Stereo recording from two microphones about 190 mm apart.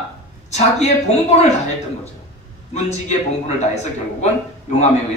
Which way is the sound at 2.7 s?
35° left (ahead or behind).